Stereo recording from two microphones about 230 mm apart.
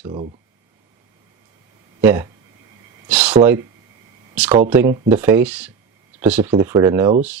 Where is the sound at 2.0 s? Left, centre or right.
Centre.